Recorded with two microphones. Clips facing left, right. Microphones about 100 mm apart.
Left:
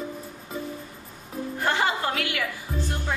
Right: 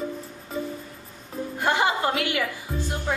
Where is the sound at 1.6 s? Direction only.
20° right (ahead or behind).